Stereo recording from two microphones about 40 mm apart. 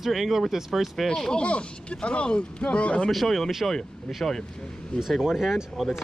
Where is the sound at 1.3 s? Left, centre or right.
Left.